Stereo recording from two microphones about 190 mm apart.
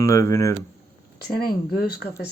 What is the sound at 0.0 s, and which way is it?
Speech, 15° left (ahead or behind).